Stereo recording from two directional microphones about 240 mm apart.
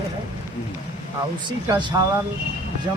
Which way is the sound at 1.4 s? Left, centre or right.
Centre.